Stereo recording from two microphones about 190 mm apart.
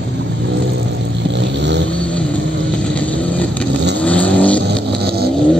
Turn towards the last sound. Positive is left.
turn(degrees=-55)  # may be behind; listen again after turning